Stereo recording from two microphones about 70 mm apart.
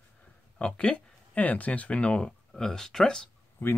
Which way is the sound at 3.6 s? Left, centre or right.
Left.